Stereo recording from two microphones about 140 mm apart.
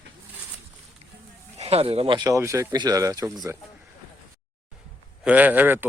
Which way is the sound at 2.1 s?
25° right (ahead or behind).